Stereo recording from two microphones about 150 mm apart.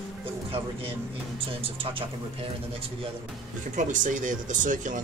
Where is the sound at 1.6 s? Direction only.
40° right (ahead or behind).